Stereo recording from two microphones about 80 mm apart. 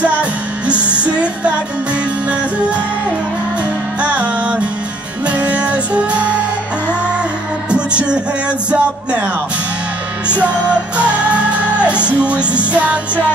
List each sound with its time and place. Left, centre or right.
0.0 s music: centre
4.0 s music: centre
7.7 s music: centre
10.2 s music: centre